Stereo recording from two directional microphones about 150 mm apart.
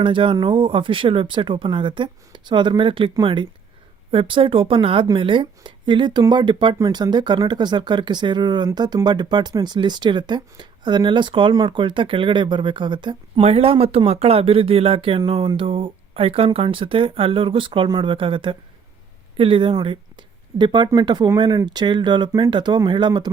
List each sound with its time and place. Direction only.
0.0 s speech: 35° right (ahead or behind)
13.4 s speech: 45° right (ahead or behind)